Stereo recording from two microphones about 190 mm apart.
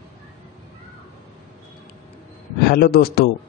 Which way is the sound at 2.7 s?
55° left (ahead or behind).